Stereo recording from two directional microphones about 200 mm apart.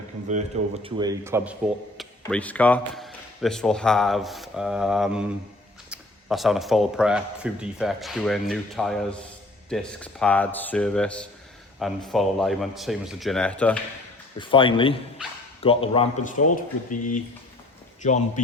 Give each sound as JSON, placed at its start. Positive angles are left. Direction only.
{"t": 0.3, "sound": "a man's voice", "side_deg": -30}
{"t": 2.0, "sound": "speech", "side_deg": 5}
{"t": 14.3, "sound": "speech", "side_deg": 25}
{"t": 15.2, "sound": "speech", "side_deg": -5}
{"t": 15.6, "sound": "speech", "side_deg": 30}
{"t": 16.2, "sound": "speech", "side_deg": 40}